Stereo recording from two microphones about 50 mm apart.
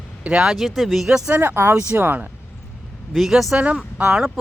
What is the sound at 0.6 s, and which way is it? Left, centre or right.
Speech, centre.